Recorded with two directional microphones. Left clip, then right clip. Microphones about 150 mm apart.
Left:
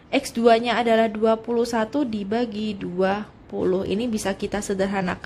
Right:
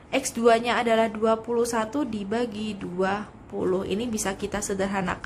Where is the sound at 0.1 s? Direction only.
35° left (ahead or behind).